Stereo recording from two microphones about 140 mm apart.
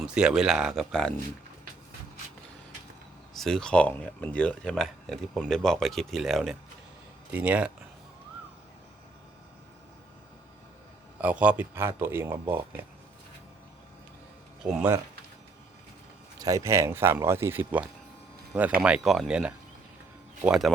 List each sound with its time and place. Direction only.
0.0 s speech: 5° right (ahead or behind)
3.3 s speech: 5° left (ahead or behind)
11.2 s speech: 10° right (ahead or behind)
14.6 s speech: 10° right (ahead or behind)
16.4 s speech: 20° right (ahead or behind); by 20.7 s 5° right (ahead or behind)